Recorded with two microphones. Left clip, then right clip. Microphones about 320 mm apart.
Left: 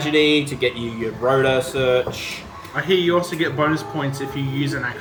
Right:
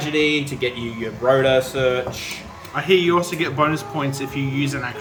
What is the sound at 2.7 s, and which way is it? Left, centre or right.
Speech, right.